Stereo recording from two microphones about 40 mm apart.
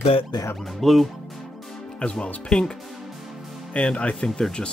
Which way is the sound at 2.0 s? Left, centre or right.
Left.